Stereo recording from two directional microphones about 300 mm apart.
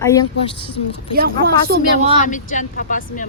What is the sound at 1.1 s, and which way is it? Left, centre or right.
Speech, right.